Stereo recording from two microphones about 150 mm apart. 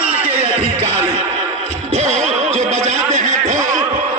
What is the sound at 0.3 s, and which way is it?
Music, 40° right (ahead or behind).